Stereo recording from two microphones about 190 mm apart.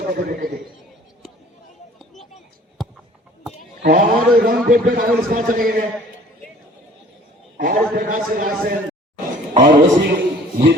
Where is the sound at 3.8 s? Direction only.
50° right (ahead or behind).